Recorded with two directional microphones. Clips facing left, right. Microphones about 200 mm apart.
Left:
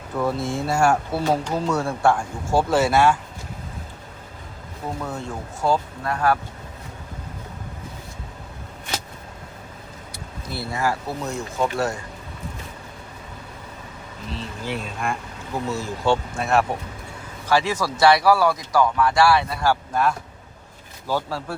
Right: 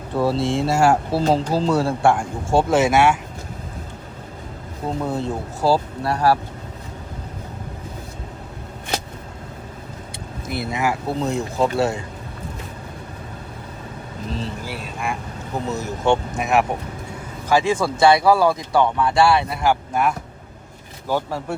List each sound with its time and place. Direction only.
0.1 s speech: 30° right (ahead or behind)
4.9 s speech: 30° right (ahead or behind)
10.4 s speech: 20° right (ahead or behind)
11.6 s speech: 30° right (ahead or behind)
14.6 s speech: 10° right (ahead or behind)
15.6 s speech: 20° right (ahead or behind)